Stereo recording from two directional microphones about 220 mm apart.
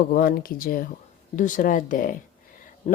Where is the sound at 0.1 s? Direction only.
40° left (ahead or behind).